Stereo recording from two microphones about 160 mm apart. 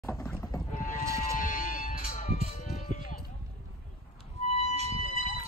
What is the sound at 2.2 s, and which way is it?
Music, 40° left (ahead or behind).